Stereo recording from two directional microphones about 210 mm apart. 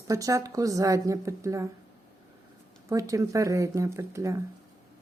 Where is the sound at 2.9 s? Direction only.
15° right (ahead or behind).